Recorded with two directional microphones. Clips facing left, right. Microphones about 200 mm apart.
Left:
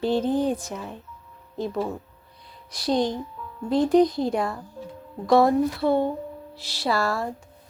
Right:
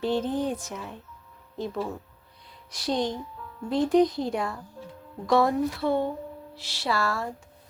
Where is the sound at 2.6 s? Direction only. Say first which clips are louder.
Left 4 dB; 35° left (ahead or behind).